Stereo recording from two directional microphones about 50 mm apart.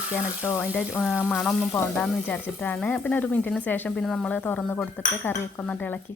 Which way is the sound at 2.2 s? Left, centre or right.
Left.